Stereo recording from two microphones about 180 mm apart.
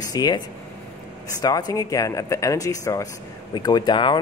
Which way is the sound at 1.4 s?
20° left (ahead or behind).